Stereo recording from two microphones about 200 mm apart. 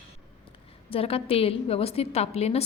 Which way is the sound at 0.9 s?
30° left (ahead or behind).